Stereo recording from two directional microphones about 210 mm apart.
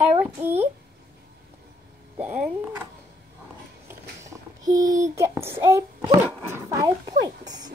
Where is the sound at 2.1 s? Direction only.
5° right (ahead or behind).